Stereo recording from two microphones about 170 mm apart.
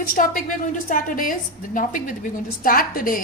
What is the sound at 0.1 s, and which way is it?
A woman's voice, 55° left (ahead or behind).